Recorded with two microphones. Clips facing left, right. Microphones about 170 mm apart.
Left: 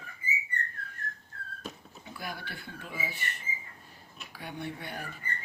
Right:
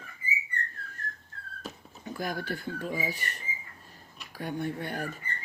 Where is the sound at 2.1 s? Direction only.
45° right (ahead or behind).